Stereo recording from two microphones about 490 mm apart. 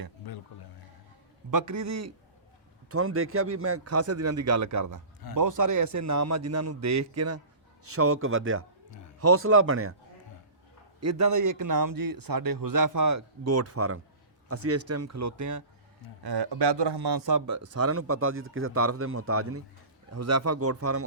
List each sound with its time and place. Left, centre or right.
1.5 s speech: right
11.0 s speech: right
16.2 s speech: right